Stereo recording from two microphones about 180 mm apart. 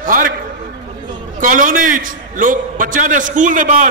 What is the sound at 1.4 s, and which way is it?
A man's voice, 50° right (ahead or behind).